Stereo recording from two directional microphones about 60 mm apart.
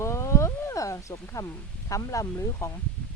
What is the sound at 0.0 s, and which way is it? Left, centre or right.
Speech, left.